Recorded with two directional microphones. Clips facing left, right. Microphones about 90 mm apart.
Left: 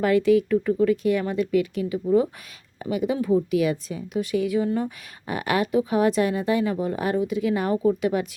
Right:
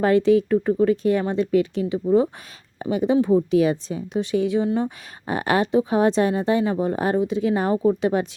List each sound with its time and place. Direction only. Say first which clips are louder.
0.0 s a woman's voice: right 2 dB; 30° right (ahead or behind)